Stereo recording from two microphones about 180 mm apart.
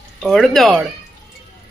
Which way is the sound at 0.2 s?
Centre (ahead or behind).